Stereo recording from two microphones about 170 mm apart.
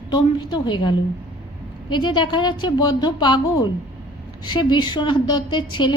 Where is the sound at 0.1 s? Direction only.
25° left (ahead or behind).